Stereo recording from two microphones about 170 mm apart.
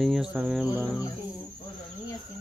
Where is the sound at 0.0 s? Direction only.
5° right (ahead or behind).